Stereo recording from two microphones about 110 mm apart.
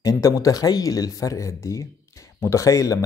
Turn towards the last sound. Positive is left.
turn(degrees=30)  # may be behind; listen again after turning